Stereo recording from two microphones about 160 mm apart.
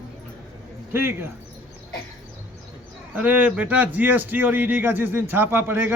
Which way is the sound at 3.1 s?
10° right (ahead or behind).